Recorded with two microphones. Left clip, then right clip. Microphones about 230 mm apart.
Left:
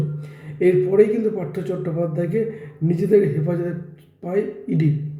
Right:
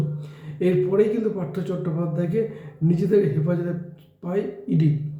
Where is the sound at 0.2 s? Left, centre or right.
Centre.